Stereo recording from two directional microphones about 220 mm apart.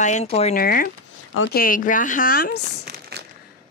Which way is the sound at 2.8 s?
45° right (ahead or behind).